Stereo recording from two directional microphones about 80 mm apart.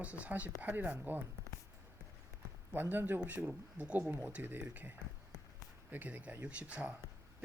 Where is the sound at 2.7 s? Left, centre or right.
Right.